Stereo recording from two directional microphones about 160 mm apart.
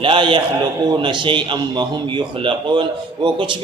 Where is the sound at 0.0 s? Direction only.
30° right (ahead or behind).